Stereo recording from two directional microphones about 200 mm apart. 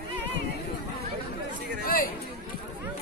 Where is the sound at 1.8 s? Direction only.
45° left (ahead or behind).